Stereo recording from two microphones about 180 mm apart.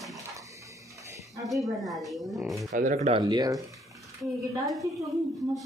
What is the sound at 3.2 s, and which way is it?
Speech, 20° right (ahead or behind).